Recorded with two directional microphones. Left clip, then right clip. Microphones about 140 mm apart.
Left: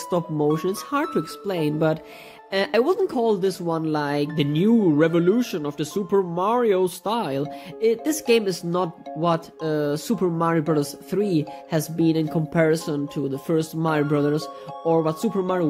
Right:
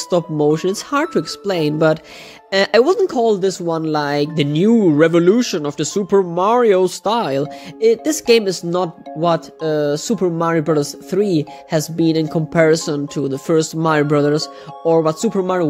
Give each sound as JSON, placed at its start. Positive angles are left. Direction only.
{"t": 0.1, "sound": "speech", "side_deg": -45}